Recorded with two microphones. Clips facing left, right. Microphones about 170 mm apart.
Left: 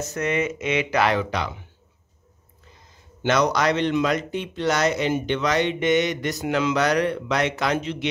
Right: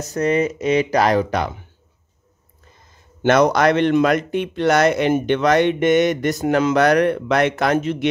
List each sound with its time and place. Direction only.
0.1 s speech: 35° right (ahead or behind)
3.2 s speech: 50° right (ahead or behind)